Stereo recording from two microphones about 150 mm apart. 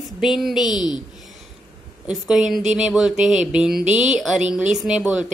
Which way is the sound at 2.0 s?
Centre (ahead or behind).